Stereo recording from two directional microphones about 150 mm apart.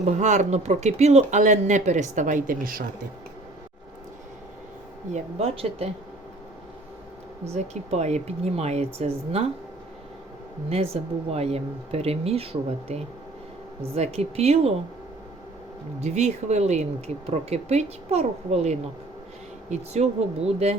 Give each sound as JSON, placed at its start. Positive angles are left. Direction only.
{"t": 0.0, "sound": "speech", "side_deg": -50}
{"t": 5.1, "sound": "speech", "side_deg": -40}
{"t": 7.5, "sound": "speech", "side_deg": -45}
{"t": 10.9, "sound": "speech", "side_deg": -45}
{"t": 16.0, "sound": "speech", "side_deg": -50}